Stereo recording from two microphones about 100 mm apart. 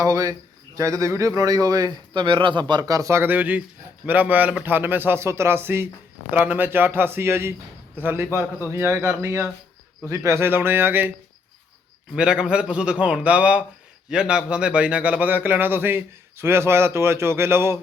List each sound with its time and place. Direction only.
0.0 s a man's voice: 35° right (ahead or behind)
2.1 s a man's voice: 55° right (ahead or behind); by 11.1 s 20° right (ahead or behind)
12.1 s a man's voice: 10° right (ahead or behind); by 17.7 s 25° right (ahead or behind)